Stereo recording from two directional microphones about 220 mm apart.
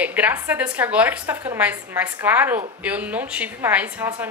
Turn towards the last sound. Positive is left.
turn(degrees=-10)  # may be behind; listen again after turning